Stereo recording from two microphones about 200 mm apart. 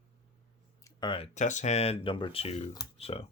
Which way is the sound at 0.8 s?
25° left (ahead or behind).